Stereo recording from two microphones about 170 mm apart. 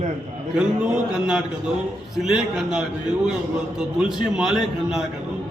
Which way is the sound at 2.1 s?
Centre (ahead or behind).